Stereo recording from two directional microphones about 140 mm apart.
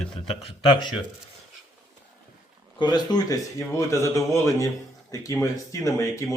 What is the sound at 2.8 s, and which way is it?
Speech, 30° left (ahead or behind).